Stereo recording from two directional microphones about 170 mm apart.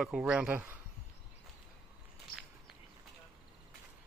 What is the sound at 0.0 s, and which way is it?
Speech, 5° right (ahead or behind).